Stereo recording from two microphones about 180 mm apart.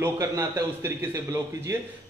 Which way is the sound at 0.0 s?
15° right (ahead or behind).